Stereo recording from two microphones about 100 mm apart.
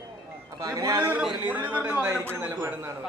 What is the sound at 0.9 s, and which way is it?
A man's voice, 15° right (ahead or behind).